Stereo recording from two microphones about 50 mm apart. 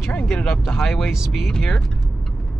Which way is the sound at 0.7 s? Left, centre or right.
Centre.